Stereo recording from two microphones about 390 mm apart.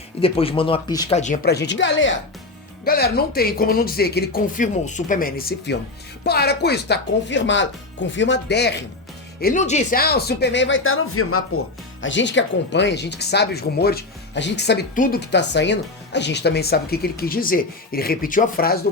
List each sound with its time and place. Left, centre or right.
0.2 s speech: centre